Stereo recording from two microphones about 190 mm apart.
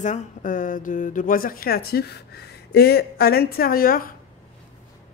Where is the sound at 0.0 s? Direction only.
40° left (ahead or behind).